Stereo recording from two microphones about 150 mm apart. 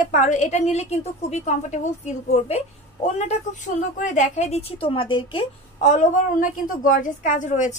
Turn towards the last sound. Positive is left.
turn(degrees=55)  # may be behind; listen again after turning